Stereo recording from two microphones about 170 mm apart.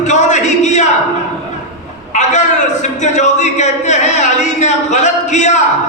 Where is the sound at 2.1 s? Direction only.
45° left (ahead or behind).